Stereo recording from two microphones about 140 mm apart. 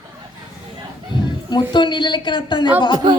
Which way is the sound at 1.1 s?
30° left (ahead or behind).